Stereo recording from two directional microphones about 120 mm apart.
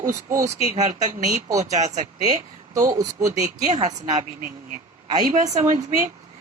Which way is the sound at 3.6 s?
85° right.